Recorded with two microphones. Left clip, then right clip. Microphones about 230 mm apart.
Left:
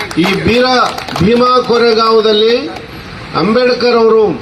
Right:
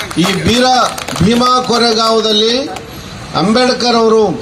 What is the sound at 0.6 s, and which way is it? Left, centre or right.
Speech, right.